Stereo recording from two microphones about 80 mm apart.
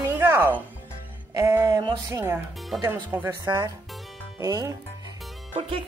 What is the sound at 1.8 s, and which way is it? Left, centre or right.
Speech, right.